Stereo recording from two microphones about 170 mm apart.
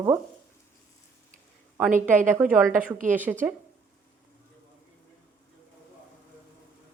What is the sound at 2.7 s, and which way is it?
Speech, 50° right (ahead or behind).